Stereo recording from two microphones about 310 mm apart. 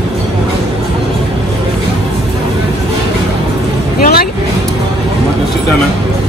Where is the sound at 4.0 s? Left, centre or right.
Left.